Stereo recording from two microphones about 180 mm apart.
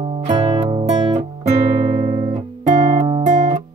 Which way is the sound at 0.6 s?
35° right (ahead or behind).